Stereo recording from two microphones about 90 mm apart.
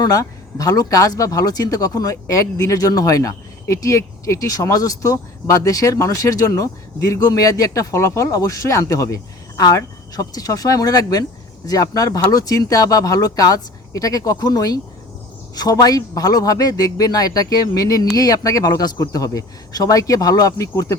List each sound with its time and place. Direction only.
0.0 s a man's voice: 45° left (ahead or behind)